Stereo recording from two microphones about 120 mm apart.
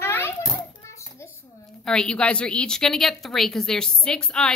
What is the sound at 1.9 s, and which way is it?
A woman's voice, 5° left (ahead or behind).